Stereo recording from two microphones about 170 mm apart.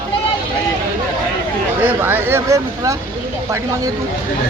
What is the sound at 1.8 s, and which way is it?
Speech, 10° right (ahead or behind).